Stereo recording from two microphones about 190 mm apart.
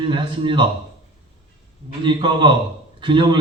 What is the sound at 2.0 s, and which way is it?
A man's voice, 25° right (ahead or behind).